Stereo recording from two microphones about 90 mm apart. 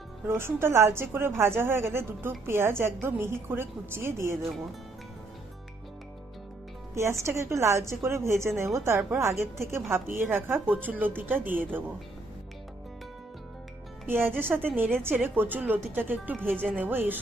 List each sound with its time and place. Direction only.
0.3 s a woman's voice: 30° right (ahead or behind)
6.9 s a woman's voice: 30° right (ahead or behind)
14.1 s a woman's voice: 25° right (ahead or behind)